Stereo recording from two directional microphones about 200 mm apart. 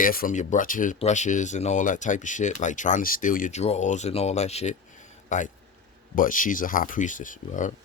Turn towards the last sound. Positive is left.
turn(degrees=40)  # may be behind; listen again after turning